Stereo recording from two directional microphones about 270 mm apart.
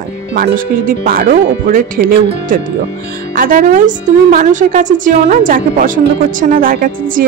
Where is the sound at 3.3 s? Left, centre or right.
Right.